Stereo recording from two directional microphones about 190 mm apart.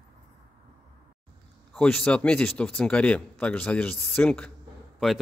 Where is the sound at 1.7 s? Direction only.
5° left (ahead or behind).